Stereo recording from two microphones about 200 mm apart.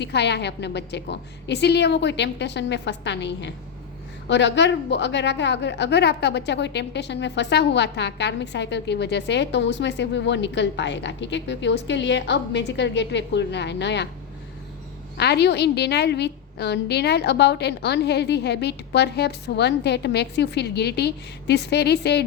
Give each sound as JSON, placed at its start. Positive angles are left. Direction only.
{"t": 0.0, "sound": "a woman's voice", "side_deg": 60}
{"t": 15.2, "sound": "a woman's voice", "side_deg": 55}